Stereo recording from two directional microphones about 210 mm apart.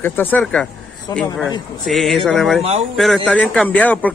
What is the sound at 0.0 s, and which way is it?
Speech, 10° left (ahead or behind).